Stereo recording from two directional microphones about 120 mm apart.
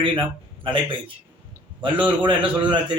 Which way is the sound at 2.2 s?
40° right (ahead or behind).